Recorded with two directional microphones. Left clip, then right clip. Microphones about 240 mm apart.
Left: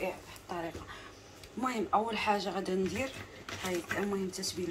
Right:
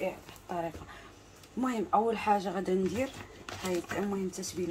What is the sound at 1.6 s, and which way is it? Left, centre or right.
Speech, right.